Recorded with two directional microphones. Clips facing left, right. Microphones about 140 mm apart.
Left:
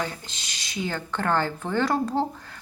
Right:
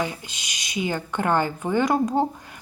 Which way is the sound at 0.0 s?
15° right (ahead or behind).